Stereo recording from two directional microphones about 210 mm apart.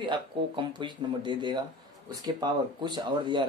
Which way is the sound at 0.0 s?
20° right (ahead or behind).